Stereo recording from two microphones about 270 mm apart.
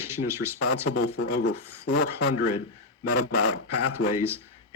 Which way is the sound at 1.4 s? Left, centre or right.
Left.